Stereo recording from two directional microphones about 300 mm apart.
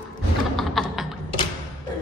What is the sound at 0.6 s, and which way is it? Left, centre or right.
Computer keyboard, centre.